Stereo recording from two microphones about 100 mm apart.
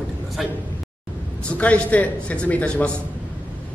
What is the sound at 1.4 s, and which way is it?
A man's voice, 15° left (ahead or behind).